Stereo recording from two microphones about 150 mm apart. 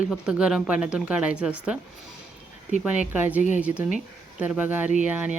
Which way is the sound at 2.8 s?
10° right (ahead or behind).